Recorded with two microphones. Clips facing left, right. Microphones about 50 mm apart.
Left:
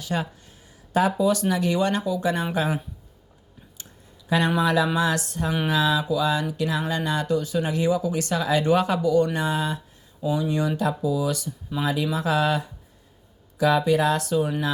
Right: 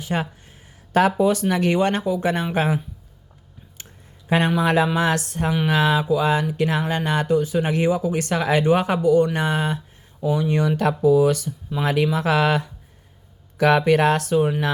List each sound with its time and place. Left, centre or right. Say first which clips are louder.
0.0 s speech: right 2 dB; right
4.3 s a man's voice: right 2 dB; right
8.6 s speech: right 3 dB; right